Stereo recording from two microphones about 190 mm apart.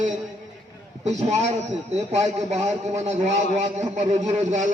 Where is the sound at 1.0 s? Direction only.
35° right (ahead or behind).